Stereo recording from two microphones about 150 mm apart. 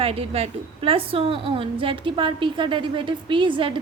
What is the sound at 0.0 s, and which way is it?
A woman's voice, 40° right (ahead or behind).